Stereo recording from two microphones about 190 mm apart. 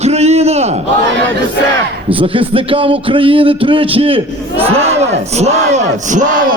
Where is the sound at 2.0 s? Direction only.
30° right (ahead or behind).